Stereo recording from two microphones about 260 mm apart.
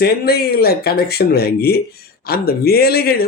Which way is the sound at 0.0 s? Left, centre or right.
Left.